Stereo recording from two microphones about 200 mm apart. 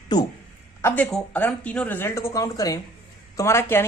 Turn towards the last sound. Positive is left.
turn(degrees=10)  # may be behind; listen again after turning